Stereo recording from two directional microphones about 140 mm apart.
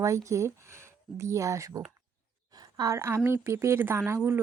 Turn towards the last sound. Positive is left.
turn(degrees=-15)  # may be behind; listen again after turning